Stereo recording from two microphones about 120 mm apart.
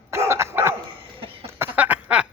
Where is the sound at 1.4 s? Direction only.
15° right (ahead or behind).